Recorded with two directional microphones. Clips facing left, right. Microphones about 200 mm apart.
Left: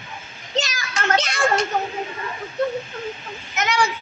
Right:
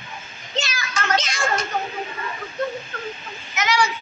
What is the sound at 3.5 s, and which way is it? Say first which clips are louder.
Speech: even; 55° left (ahead or behind).